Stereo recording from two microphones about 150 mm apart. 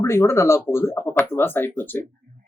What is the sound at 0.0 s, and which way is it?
Speech, 20° left (ahead or behind).